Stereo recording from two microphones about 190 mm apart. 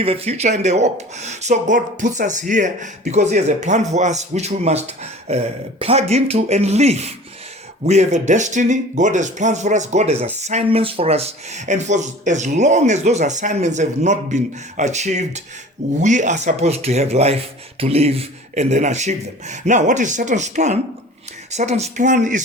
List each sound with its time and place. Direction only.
0.0 s speech: 30° right (ahead or behind)